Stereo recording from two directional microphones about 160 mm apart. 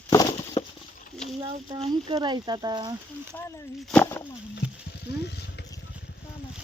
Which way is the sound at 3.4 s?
10° left (ahead or behind).